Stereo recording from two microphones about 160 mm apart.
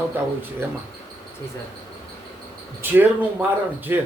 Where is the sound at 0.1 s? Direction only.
10° right (ahead or behind).